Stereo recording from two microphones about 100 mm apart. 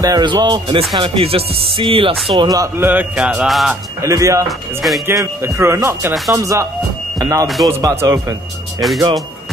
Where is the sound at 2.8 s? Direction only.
20° right (ahead or behind).